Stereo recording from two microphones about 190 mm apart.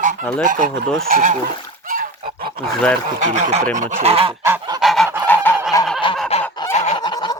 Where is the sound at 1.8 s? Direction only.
45° right (ahead or behind).